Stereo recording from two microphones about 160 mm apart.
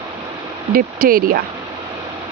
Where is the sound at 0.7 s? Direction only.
65° right (ahead or behind).